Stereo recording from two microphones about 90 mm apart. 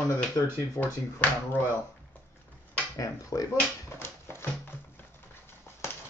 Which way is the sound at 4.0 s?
25° left (ahead or behind).